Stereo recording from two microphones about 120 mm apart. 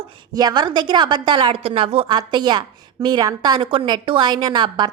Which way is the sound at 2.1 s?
35° right (ahead or behind).